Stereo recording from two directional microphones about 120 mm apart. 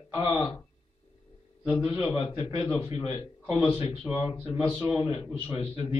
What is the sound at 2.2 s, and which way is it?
A man's voice, 50° left (ahead or behind).